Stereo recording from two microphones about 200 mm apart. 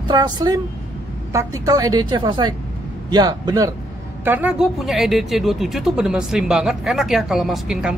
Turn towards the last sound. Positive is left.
turn(degrees=0)  # may be behind; listen again after turning